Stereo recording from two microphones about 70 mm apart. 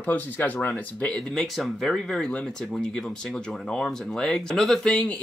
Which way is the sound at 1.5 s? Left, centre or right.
Centre.